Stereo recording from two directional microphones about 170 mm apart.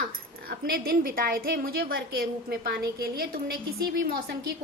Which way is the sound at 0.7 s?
60° right (ahead or behind).